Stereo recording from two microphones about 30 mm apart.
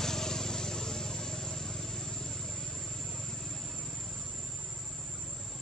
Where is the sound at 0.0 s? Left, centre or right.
Centre.